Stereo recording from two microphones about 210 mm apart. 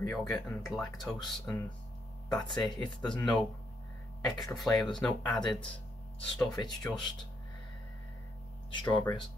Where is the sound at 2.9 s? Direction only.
5° left (ahead or behind).